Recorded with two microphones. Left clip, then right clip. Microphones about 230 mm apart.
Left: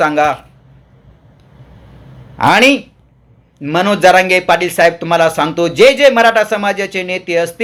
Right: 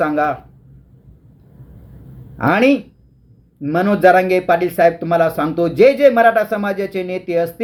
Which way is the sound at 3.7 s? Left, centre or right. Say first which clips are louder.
Left 3 dB; left.